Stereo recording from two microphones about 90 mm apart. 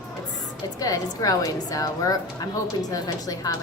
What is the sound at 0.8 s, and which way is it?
Speech, 40° left (ahead or behind).